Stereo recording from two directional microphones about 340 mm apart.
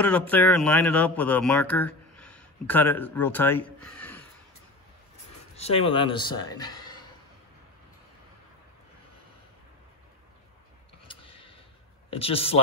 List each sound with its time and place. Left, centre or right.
0.3 s speech: centre
5.6 s a man's voice: centre
11.1 s a sound: centre
12.1 s a man's voice: centre